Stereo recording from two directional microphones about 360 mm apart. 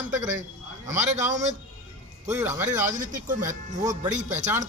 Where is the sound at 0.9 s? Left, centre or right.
Centre.